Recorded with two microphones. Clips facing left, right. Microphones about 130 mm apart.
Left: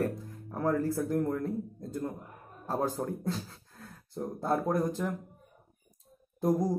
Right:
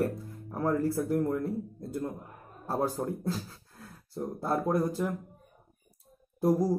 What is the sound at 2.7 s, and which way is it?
Speech, 15° right (ahead or behind).